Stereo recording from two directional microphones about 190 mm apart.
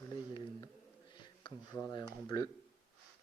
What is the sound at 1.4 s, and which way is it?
Speech, 20° left (ahead or behind).